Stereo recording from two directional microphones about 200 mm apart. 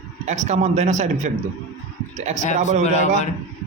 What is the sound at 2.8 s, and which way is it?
Speech, 35° left (ahead or behind).